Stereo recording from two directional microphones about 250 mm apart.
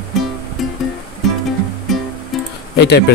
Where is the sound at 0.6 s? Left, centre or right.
Centre.